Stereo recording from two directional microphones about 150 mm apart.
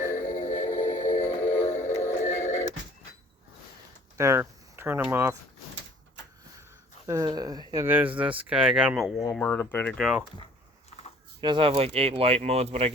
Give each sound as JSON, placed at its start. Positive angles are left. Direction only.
{"t": 0.1, "sound": "music", "side_deg": 55}
{"t": 4.2, "sound": "speech", "side_deg": -15}
{"t": 7.1, "sound": "speech", "side_deg": -25}
{"t": 10.0, "sound": "speech", "side_deg": -5}
{"t": 11.3, "sound": "speech", "side_deg": -30}